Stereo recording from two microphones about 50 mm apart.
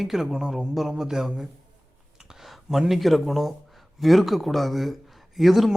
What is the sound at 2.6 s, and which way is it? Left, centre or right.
Speech, centre.